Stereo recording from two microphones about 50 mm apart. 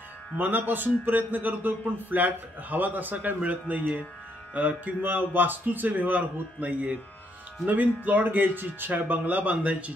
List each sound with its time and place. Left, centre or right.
0.4 s a man's voice: right